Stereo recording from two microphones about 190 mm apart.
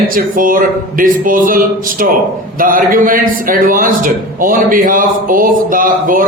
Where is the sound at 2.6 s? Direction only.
45° right (ahead or behind).